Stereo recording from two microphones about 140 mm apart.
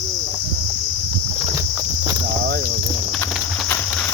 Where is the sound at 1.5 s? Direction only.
20° right (ahead or behind).